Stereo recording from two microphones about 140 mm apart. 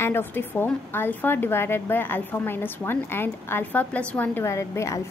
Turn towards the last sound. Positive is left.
turn(degrees=20)  # may be behind; listen again after turning